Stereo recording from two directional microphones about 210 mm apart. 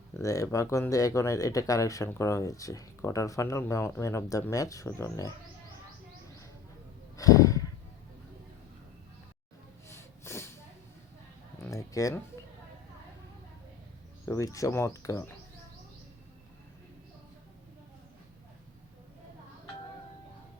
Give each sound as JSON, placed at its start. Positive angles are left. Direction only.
{"t": 0.2, "sound": "speech", "side_deg": 15}
{"t": 7.2, "sound": "a sound", "side_deg": 15}
{"t": 9.9, "sound": "snort", "side_deg": 10}
{"t": 11.6, "sound": "speech", "side_deg": 15}
{"t": 14.3, "sound": "speech", "side_deg": 15}